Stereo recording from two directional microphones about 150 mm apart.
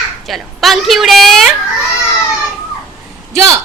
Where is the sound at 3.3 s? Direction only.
20° right (ahead or behind).